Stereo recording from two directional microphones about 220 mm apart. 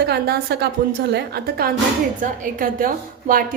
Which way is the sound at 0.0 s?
45° right (ahead or behind).